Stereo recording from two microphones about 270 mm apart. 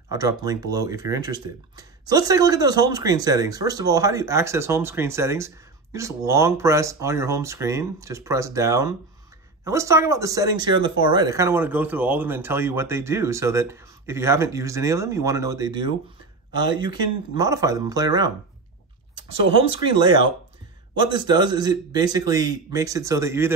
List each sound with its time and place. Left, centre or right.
0.1 s speech: centre
17.4 s speech: centre
19.6 s speech: centre